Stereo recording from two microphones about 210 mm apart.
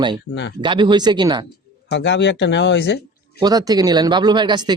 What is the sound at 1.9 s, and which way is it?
Speech, 55° left (ahead or behind).